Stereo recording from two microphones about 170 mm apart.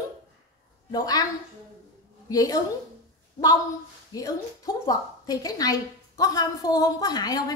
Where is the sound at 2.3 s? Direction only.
20° left (ahead or behind).